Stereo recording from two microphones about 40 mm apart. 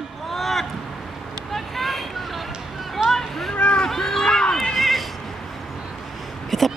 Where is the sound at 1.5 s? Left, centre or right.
Centre.